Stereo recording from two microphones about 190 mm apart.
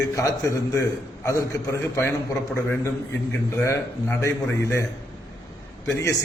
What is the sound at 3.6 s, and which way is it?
A man's voice, 15° left (ahead or behind).